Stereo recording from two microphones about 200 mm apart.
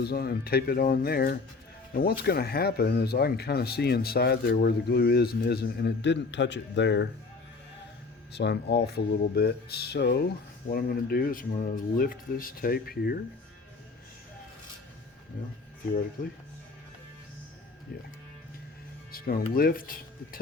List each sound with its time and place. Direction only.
0.0 s speech: 50° left (ahead or behind)
8.3 s speech: 55° left (ahead or behind)
19.1 s speech: 45° left (ahead or behind)